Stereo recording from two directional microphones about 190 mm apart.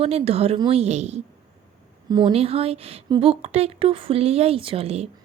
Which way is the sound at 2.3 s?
30° right (ahead or behind).